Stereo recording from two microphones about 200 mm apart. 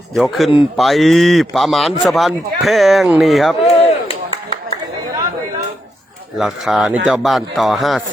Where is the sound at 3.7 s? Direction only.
30° left (ahead or behind).